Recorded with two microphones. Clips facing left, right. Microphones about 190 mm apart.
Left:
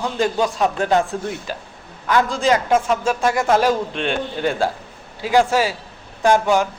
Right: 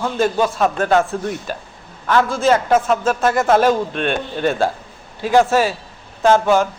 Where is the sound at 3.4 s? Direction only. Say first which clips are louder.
Right 4 dB; 50° right (ahead or behind).